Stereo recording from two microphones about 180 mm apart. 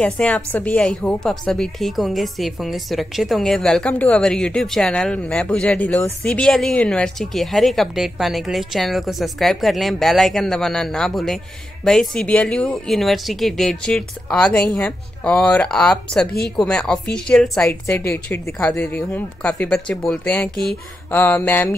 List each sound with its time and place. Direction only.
0.0 s speech: 5° left (ahead or behind)
16.3 s speech: 60° left (ahead or behind)
16.5 s speech: 5° left (ahead or behind)
18.0 s speech: 15° left (ahead or behind)